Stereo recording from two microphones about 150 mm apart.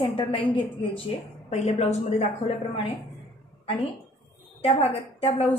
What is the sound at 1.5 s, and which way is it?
A woman's voice, 50° left (ahead or behind).